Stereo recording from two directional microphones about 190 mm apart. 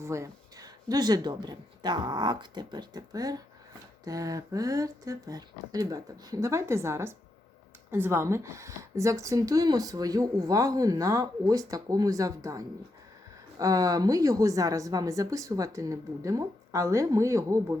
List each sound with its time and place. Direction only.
0.0 s speech: 15° right (ahead or behind)